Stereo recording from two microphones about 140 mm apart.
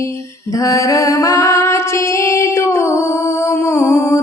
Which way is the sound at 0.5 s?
25° left (ahead or behind).